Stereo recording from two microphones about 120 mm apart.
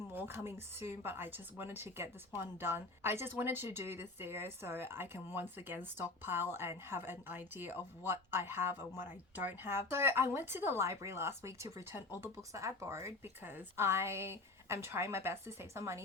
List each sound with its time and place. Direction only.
0.1 s speech: 20° right (ahead or behind)